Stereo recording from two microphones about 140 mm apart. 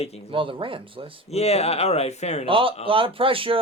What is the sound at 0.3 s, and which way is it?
Speech, 35° right (ahead or behind).